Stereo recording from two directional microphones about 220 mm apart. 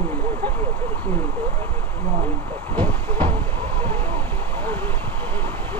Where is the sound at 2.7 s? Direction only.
10° left (ahead or behind).